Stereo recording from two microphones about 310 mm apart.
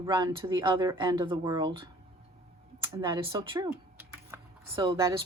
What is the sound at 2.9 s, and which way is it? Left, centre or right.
Speech, centre.